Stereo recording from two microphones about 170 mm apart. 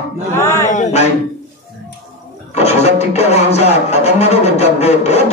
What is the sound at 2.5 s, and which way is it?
Speech, 40° left (ahead or behind).